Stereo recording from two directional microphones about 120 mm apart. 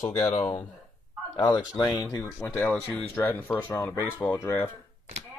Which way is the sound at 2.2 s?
15° left (ahead or behind).